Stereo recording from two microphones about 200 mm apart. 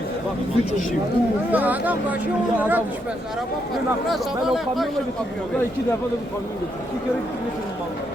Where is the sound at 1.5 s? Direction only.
10° right (ahead or behind).